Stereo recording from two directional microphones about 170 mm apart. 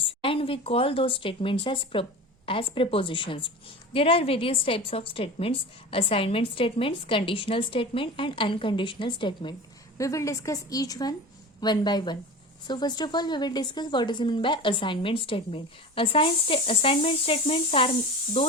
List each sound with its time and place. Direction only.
0.2 s a woman's voice: 30° left (ahead or behind)
10.0 s a woman's voice: 20° left (ahead or behind); by 17.9 s 35° left (ahead or behind)